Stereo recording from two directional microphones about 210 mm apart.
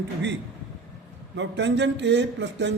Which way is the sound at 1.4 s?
60° right (ahead or behind).